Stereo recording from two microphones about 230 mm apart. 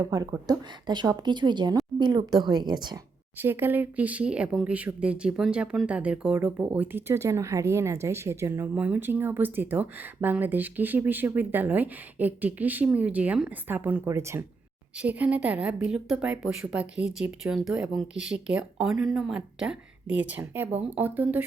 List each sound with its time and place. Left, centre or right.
0.0 s speech: centre